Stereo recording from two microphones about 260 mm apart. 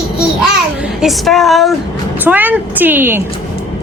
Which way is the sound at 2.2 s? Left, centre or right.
Centre.